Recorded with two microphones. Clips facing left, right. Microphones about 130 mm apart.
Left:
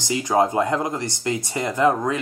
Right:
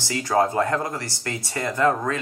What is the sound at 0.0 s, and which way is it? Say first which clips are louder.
Speech: left 2 dB; 20° left (ahead or behind).